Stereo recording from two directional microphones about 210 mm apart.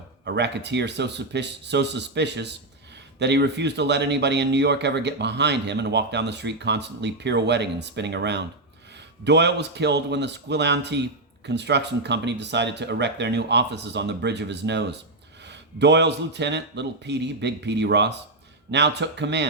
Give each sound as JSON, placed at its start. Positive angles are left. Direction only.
{"t": 0.3, "sound": "speech", "side_deg": -55}